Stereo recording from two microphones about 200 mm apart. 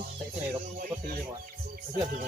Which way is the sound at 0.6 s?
45° right (ahead or behind).